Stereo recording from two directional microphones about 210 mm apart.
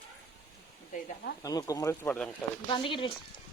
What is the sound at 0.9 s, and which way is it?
Speech, 50° left (ahead or behind).